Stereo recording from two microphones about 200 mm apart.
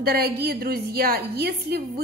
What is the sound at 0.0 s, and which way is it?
A woman's voice, 50° right (ahead or behind).